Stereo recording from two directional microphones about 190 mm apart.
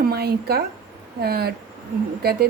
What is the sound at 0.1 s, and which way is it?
A woman's voice, 55° right (ahead or behind).